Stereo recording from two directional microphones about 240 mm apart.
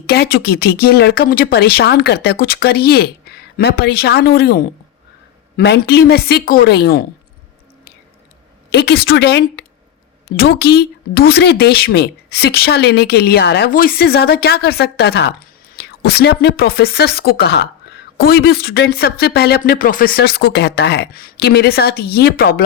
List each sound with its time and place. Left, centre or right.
0.1 s speech: left
8.7 s speech: left